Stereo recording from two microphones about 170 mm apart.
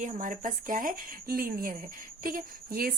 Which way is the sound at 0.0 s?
50° right (ahead or behind).